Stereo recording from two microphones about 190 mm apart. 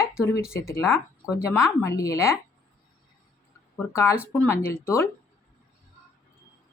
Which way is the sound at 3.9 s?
15° left (ahead or behind).